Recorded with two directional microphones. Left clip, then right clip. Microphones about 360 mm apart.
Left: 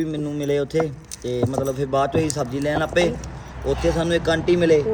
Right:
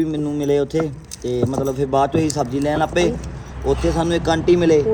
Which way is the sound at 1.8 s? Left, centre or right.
Centre.